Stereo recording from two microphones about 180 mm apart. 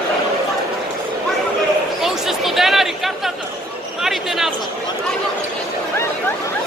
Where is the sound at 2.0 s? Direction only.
Centre (ahead or behind).